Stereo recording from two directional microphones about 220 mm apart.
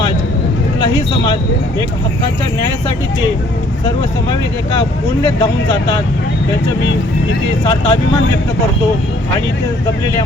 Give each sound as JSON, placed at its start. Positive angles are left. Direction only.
{"t": 5.4, "sound": "speech", "side_deg": 20}
{"t": 7.6, "sound": "speech", "side_deg": 20}